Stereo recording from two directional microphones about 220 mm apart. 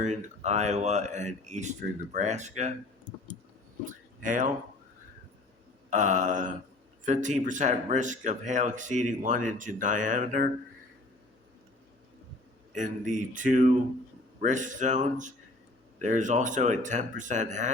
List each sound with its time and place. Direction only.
0.0 s speech: 30° right (ahead or behind)
3.8 s speech: 35° right (ahead or behind)
5.9 s speech: 35° right (ahead or behind)
12.7 s speech: 35° right (ahead or behind)